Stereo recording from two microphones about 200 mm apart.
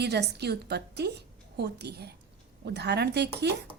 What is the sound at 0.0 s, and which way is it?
A woman's voice, 55° right (ahead or behind).